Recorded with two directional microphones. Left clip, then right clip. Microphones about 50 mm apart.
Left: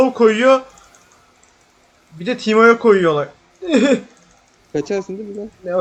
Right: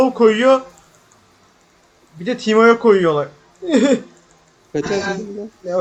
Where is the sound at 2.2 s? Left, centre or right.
Centre.